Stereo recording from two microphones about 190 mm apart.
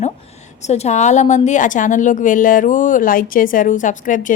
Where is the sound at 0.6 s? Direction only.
35° left (ahead or behind).